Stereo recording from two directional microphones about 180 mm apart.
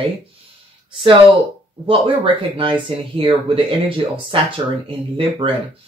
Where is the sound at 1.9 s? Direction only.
30° right (ahead or behind).